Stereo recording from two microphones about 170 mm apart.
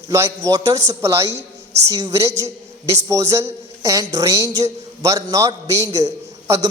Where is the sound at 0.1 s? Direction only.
20° right (ahead or behind).